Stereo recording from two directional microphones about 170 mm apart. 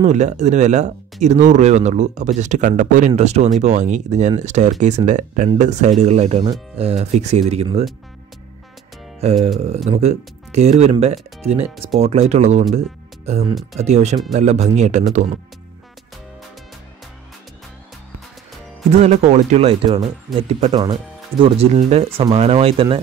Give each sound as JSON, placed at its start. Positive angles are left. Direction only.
{"t": 0.0, "sound": "speech", "side_deg": -45}
{"t": 9.2, "sound": "speech", "side_deg": -40}
{"t": 12.7, "sound": "music", "side_deg": -40}
{"t": 13.7, "sound": "speech", "side_deg": -40}
{"t": 18.9, "sound": "speech", "side_deg": -40}
{"t": 20.7, "sound": "speech", "side_deg": -25}